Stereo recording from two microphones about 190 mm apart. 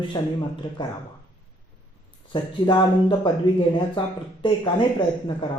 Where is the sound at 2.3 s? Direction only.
25° left (ahead or behind).